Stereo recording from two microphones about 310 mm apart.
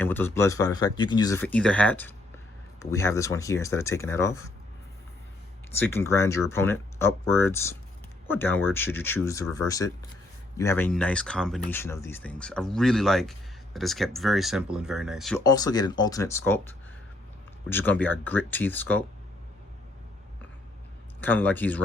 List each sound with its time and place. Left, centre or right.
0.0 s speech: centre
5.8 s speech: centre
21.2 s speech: centre